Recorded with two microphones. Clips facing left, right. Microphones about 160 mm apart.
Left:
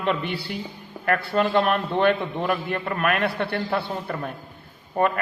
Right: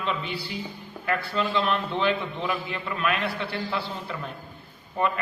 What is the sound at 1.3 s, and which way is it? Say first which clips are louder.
A man's voice: left 5 dB; 55° left (ahead or behind).